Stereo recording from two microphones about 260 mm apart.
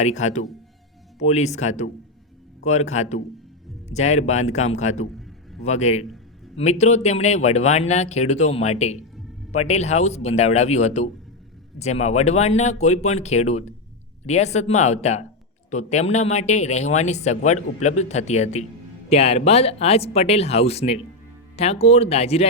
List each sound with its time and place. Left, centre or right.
0.0 s speech: left